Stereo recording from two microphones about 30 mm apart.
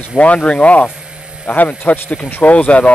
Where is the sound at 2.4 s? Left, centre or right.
Left.